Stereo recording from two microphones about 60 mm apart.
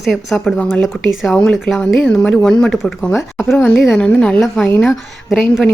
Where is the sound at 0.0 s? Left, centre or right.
Centre.